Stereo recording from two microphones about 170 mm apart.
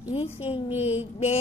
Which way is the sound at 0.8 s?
35° left (ahead or behind).